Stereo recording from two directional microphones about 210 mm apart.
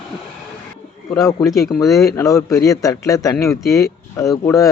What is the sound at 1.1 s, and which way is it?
A man's voice, 15° left (ahead or behind).